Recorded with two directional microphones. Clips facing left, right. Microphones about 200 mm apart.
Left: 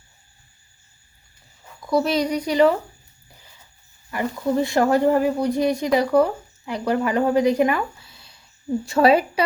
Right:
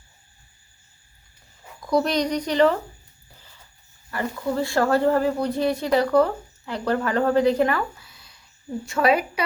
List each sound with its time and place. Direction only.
1.8 s speech: centre (ahead or behind)
4.1 s speech: 15° left (ahead or behind)
8.0 s a sound: 30° left (ahead or behind)
8.9 s a woman's voice: 30° left (ahead or behind)